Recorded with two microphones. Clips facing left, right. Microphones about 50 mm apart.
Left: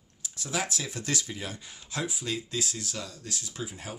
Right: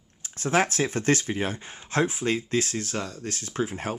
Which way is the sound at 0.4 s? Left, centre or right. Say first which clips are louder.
Right 9 dB; right.